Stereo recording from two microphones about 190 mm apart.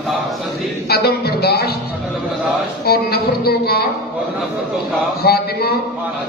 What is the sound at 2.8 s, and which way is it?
A man's voice, 55° left (ahead or behind).